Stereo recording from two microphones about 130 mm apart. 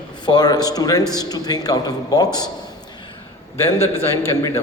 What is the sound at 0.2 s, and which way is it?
A man's voice, 30° left (ahead or behind).